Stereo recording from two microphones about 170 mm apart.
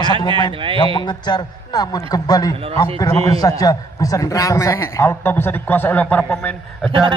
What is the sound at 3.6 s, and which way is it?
A man's voice, 20° left (ahead or behind).